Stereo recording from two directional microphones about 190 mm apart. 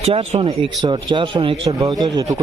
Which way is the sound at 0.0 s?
30° right (ahead or behind).